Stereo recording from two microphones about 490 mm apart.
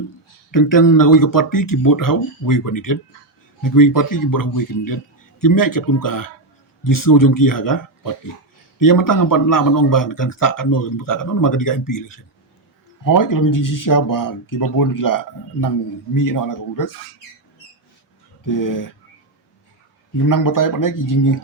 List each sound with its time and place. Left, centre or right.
0.5 s speech: left
18.4 s speech: left
20.2 s speech: left